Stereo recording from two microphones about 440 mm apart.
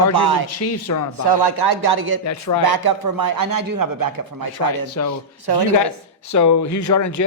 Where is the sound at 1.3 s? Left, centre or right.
Right.